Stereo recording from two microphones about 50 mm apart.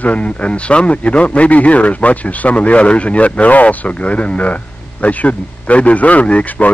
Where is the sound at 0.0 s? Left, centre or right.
Left.